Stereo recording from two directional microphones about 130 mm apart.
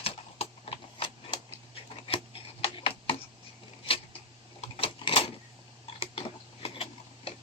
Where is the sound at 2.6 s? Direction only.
45° left (ahead or behind).